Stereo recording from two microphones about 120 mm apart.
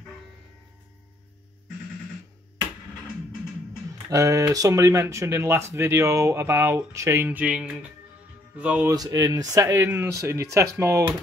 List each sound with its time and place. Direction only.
4.1 s speech: 25° right (ahead or behind)
7.2 s speech: 10° right (ahead or behind)
8.8 s speech: 30° right (ahead or behind)